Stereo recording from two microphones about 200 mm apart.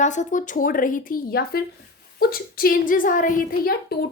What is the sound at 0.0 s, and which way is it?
A woman's voice, 35° left (ahead or behind).